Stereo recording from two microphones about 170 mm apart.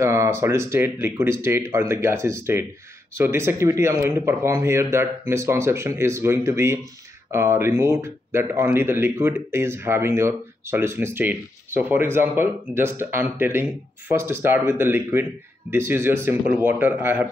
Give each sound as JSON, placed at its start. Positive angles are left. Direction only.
{"t": 0.0, "sound": "speech", "side_deg": -15}